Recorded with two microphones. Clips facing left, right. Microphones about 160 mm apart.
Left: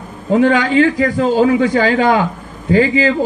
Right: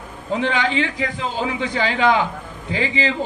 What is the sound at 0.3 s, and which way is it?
A man's voice, 45° left (ahead or behind).